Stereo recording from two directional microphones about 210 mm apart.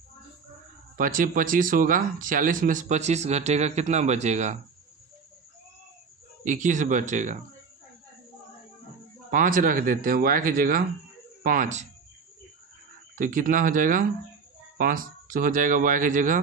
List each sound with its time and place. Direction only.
0.9 s speech: 40° right (ahead or behind)
6.4 s speech: 35° right (ahead or behind)
9.3 s speech: 40° right (ahead or behind)
13.1 s speech: 40° right (ahead or behind)